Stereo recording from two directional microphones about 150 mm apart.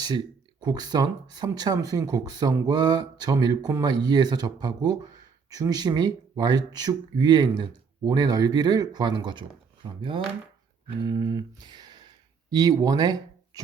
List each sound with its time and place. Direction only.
0.6 s speech: 25° right (ahead or behind)
11.0 s speech: 25° right (ahead or behind)